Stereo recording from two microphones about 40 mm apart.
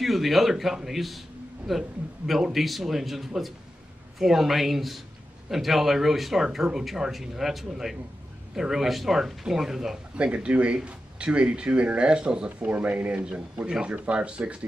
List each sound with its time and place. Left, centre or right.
0.0 s speech: centre
10.1 s speech: right
13.1 s speech: right